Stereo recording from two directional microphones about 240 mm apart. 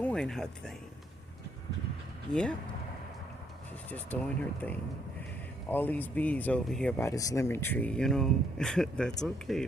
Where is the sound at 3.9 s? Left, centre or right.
Centre.